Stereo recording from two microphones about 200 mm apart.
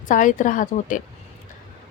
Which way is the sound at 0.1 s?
40° left (ahead or behind).